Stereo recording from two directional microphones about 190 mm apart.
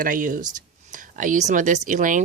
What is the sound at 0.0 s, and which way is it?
Speech, 45° right (ahead or behind).